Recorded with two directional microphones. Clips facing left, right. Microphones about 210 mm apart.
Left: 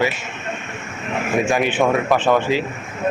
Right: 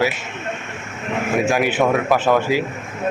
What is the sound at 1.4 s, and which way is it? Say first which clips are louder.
A man's voice: even; 5° right (ahead or behind).